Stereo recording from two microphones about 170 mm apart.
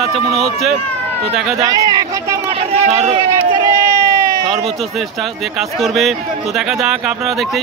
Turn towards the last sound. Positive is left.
turn(degrees=0)  # may be behind; listen again after turning